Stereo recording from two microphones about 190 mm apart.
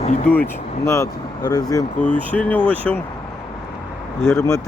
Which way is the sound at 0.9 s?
20° left (ahead or behind).